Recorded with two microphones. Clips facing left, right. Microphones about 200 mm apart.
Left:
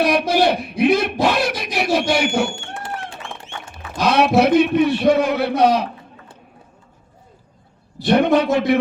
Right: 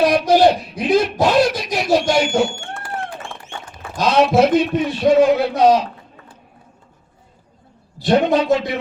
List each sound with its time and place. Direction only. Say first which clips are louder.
0.0 s speech: right 3 dB; 60° left (ahead or behind)
2.7 s a sound: right 2 dB; 25° left (ahead or behind)
4.0 s a man's voice: right 1 dB; 60° left (ahead or behind)
8.0 s a man's voice: even; 60° left (ahead or behind)